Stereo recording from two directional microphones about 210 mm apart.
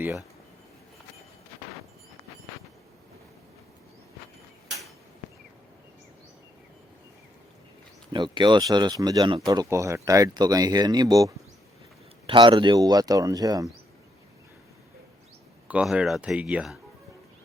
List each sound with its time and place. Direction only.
0.0 s speech: 10° right (ahead or behind)
8.1 s speech: 20° right (ahead or behind)
15.6 s speech: 5° right (ahead or behind)